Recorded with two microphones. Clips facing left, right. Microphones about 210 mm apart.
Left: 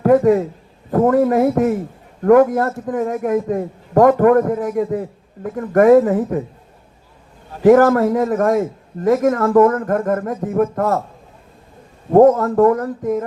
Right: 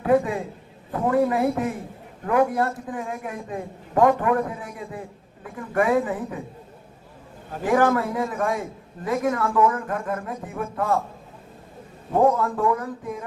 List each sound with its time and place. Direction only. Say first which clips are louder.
0.0 s a man's voice: left 8 dB; 45° left (ahead or behind)
4.2 s a man's voice: left 11 dB; 55° left (ahead or behind)
7.6 s a man's voice: left 10 dB; 40° left (ahead or behind); by 10.2 s 60° left (ahead or behind)
10.2 s a sound: left 12 dB; 40° left (ahead or behind)
12.1 s a man's voice: left 9 dB; 45° left (ahead or behind)
12.6 s speech: left 9 dB; 55° left (ahead or behind)